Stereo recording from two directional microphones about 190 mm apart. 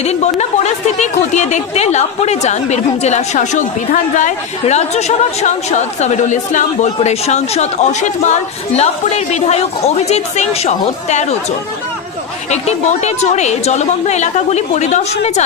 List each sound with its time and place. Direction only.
0.0 s a woman's voice: 35° left (ahead or behind)
12.4 s a woman's voice: 35° left (ahead or behind)